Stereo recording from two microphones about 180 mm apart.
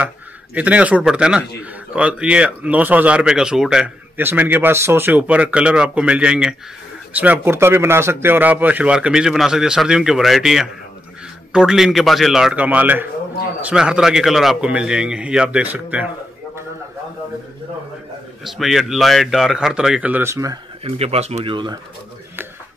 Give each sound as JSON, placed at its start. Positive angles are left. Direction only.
{"t": 0.6, "sound": "a man's voice", "side_deg": -5}
{"t": 18.4, "sound": "a man's voice", "side_deg": 0}
{"t": 20.8, "sound": "speech", "side_deg": -35}